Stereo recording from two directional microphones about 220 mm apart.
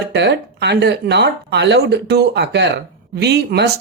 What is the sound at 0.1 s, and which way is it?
Speech, 50° right (ahead or behind).